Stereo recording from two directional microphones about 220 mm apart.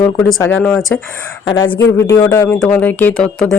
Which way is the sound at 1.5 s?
20° left (ahead or behind).